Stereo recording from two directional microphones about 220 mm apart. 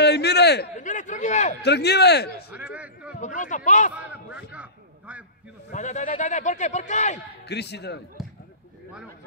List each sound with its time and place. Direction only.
0.0 s a sound: 50° left (ahead or behind)
0.7 s speech: 35° left (ahead or behind)
1.6 s a man's voice: 50° left (ahead or behind)
2.5 s a sound: 5° right (ahead or behind)
3.2 s a man's voice: 35° left (ahead or behind)
3.9 s speech: 5° right (ahead or behind)
5.7 s a man's voice: 35° left (ahead or behind)
7.4 s a man's voice: 50° left (ahead or behind)